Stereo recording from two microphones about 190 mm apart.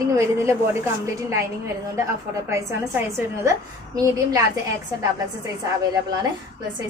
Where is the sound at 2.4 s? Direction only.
15° right (ahead or behind).